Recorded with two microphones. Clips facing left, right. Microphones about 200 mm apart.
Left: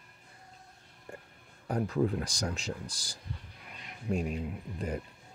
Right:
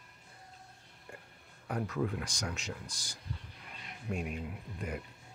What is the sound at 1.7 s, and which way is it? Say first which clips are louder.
Speech: left 5 dB; 30° left (ahead or behind).